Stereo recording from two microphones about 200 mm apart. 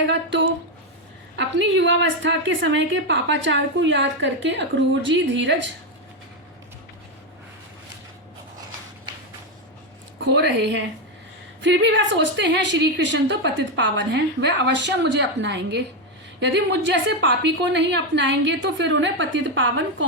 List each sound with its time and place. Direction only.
0.1 s a sound: 60° right (ahead or behind)
1.4 s a woman's voice: 60° right (ahead or behind)
10.2 s a woman's voice: 55° right (ahead or behind)